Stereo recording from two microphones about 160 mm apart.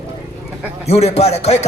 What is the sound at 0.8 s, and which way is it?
Speech, 40° left (ahead or behind).